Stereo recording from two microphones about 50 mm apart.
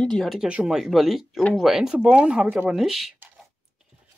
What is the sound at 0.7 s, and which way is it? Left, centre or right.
Speech, centre.